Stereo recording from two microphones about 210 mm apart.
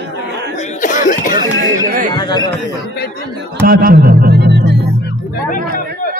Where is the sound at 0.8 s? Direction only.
40° left (ahead or behind).